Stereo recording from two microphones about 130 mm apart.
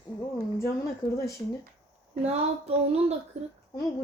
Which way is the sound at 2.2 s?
55° right (ahead or behind).